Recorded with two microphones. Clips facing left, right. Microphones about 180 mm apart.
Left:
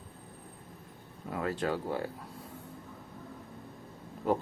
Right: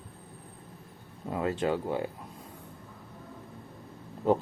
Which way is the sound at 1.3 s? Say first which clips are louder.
Right 3 dB; 20° right (ahead or behind).